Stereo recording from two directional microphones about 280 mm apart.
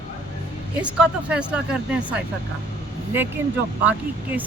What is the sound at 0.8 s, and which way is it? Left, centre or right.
Speech, centre.